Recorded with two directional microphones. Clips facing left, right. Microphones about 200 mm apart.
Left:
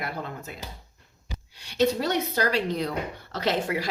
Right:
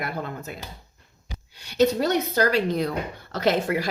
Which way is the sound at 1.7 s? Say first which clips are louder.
Right 3 dB; 45° right (ahead or behind).